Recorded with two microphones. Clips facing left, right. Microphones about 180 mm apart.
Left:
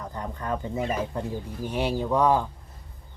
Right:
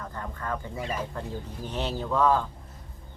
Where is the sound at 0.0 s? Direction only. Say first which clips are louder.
Left 2 dB; 20° left (ahead or behind).